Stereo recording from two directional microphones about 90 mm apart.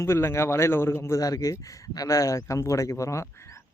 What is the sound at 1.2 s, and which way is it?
Speech, 40° left (ahead or behind).